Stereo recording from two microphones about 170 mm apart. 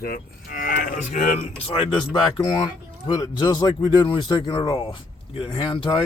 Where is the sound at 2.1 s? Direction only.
25° left (ahead or behind).